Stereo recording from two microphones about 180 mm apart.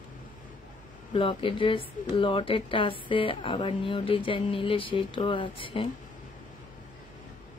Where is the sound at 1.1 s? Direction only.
30° left (ahead or behind).